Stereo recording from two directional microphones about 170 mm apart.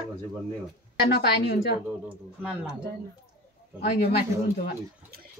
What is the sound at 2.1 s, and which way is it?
Speech, 10° right (ahead or behind).